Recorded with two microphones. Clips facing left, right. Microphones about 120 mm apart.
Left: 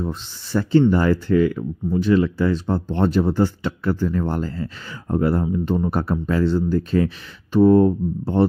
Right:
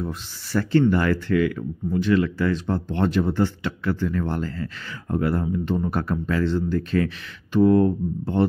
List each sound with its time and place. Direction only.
0.0 s speech: 25° left (ahead or behind)